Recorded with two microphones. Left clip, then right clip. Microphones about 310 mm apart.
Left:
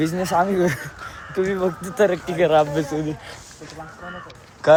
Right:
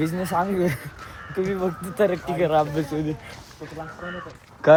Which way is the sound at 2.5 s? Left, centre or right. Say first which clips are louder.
Left 4 dB; left.